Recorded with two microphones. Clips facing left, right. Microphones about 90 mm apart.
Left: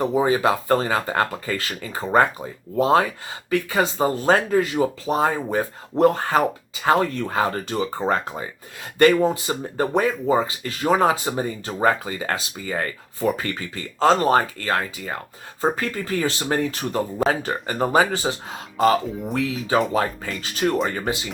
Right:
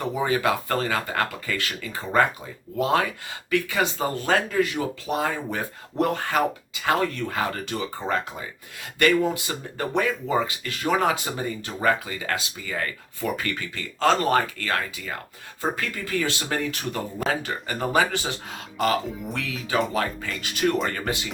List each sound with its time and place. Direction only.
0.0 s speech: 30° left (ahead or behind)
20.9 s speech: 15° left (ahead or behind)